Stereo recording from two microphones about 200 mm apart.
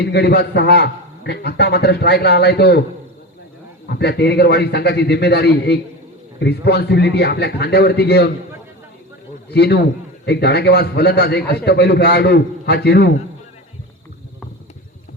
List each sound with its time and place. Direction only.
0.0 s a man's voice: 55° left (ahead or behind)
3.8 s a man's voice: 55° left (ahead or behind)
9.5 s a man's voice: 55° left (ahead or behind)